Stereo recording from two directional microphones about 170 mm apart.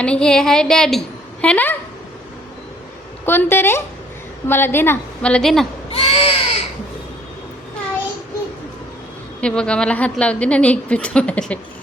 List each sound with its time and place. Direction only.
0.0 s a woman's voice: 5° left (ahead or behind)
3.2 s a woman's voice: 15° left (ahead or behind)
5.9 s crow: 35° left (ahead or behind)
9.4 s a woman's voice: 5° left (ahead or behind)